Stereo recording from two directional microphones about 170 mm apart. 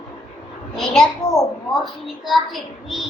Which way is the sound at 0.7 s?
Centre (ahead or behind).